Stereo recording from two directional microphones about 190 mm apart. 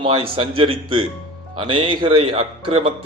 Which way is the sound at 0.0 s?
25° right (ahead or behind).